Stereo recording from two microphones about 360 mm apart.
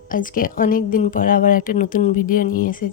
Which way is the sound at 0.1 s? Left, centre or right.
Left.